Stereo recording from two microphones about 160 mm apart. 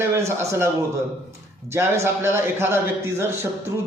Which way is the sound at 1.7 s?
15° right (ahead or behind).